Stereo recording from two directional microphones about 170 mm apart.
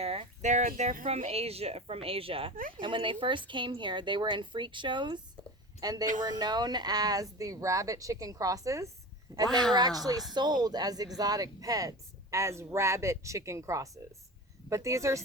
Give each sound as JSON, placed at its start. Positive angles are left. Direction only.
{"t": 0.0, "sound": "speech", "side_deg": -35}
{"t": 2.6, "sound": "speech", "side_deg": -55}
{"t": 2.8, "sound": "speech", "side_deg": -30}
{"t": 9.5, "sound": "speech", "side_deg": 5}
{"t": 10.3, "sound": "speech", "side_deg": -25}